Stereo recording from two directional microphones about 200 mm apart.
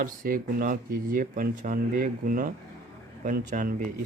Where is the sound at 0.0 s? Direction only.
45° right (ahead or behind).